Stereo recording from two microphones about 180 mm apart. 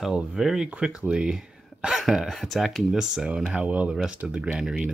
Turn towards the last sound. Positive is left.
turn(degrees=0)  # may be behind; listen again after turning